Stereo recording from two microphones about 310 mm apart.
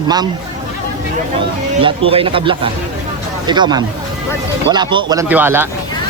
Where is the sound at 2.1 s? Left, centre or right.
Centre.